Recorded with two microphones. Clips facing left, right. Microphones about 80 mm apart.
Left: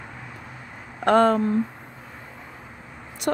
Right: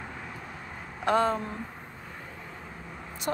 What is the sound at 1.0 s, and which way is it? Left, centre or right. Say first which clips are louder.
Speech: left 7 dB; left.